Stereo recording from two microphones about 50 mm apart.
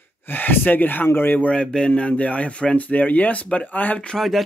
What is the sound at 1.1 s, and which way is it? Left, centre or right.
Speech, left.